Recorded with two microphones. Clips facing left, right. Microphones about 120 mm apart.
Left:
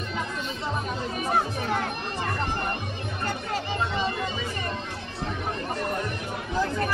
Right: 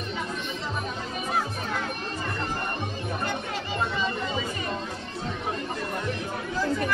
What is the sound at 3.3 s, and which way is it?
Music, 40° left (ahead or behind).